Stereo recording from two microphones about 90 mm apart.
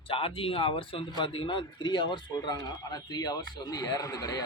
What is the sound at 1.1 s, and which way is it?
A man's voice, 70° left (ahead or behind).